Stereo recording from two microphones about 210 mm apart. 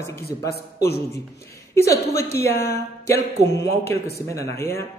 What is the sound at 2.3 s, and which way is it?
Speech, 50° left (ahead or behind).